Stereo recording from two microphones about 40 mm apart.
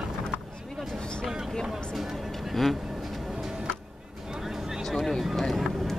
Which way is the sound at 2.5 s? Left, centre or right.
Centre.